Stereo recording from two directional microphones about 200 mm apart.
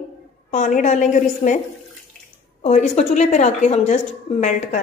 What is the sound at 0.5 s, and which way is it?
A woman's voice, 40° left (ahead or behind).